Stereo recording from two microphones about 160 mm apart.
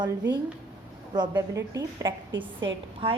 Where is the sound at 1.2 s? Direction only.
25° right (ahead or behind).